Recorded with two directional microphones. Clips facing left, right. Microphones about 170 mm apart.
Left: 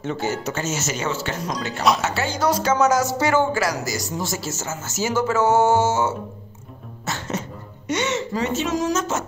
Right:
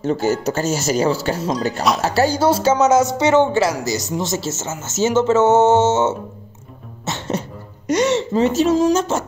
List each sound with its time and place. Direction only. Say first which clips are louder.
0.0 s speech: right 7 dB; 40° right (ahead or behind)
7.1 s throat clearing: right 4 dB; 25° right (ahead or behind)
8.5 s speech: right 7 dB; 35° right (ahead or behind)